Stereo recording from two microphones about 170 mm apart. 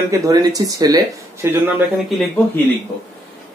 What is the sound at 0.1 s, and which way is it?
Speech, 20° right (ahead or behind).